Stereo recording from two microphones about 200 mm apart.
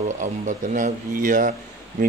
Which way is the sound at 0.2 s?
40° right (ahead or behind).